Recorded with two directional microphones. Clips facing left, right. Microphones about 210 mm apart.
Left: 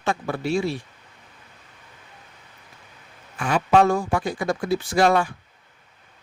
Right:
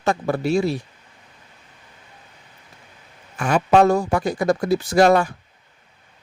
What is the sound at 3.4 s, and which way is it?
Speech, 45° right (ahead or behind).